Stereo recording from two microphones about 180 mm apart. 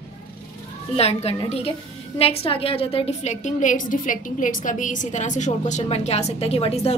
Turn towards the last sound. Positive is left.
turn(degrees=35)  # may be behind; listen again after turning